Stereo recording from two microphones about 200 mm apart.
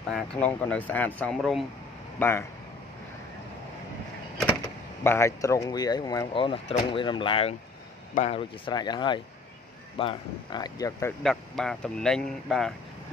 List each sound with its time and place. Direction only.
0.1 s speech: 5° left (ahead or behind)
4.6 s speech: 15° left (ahead or behind)
11.2 s speech: centre (ahead or behind)